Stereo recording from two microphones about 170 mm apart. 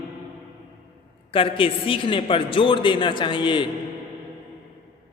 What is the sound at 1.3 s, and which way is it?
A man's voice, 30° left (ahead or behind).